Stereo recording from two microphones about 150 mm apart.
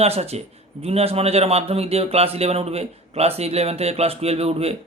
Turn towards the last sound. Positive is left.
turn(degrees=-45)  # may be behind; listen again after turning